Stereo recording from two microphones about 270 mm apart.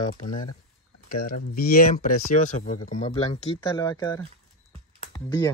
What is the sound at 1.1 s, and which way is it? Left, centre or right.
Speech, left.